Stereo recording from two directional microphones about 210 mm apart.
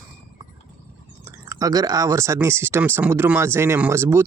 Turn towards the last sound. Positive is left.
turn(degrees=-10)  # may be behind; listen again after turning